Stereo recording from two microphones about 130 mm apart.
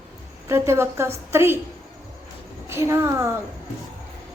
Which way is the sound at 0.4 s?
20° right (ahead or behind).